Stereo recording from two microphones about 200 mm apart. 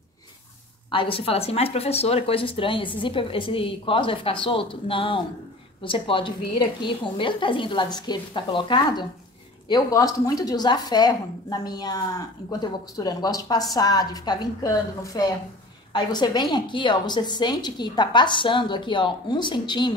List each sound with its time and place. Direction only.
0.9 s a woman's voice: 25° left (ahead or behind)